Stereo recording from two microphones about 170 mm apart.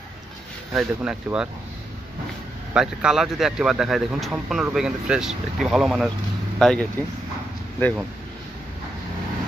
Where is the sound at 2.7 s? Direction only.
5° right (ahead or behind).